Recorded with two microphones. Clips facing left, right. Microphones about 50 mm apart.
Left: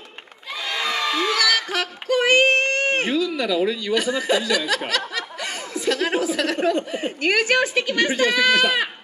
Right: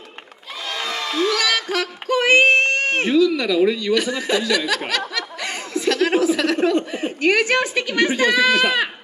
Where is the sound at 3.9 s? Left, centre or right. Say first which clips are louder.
Right 1 dB; centre.